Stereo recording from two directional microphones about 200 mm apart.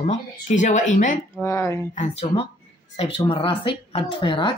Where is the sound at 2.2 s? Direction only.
30° left (ahead or behind).